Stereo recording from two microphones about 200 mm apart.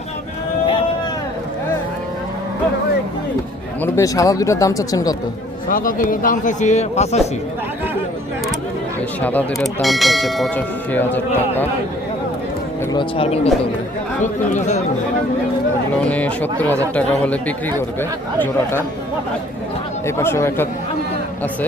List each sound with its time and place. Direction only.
3.8 s speech: 15° left (ahead or behind)
5.6 s a man's voice: 45° left (ahead or behind)
9.2 s bell: 10° left (ahead or behind)
12.9 s a man's voice: 25° left (ahead or behind)
16.0 s speech: 5° left (ahead or behind)
20.1 s speech: 15° left (ahead or behind)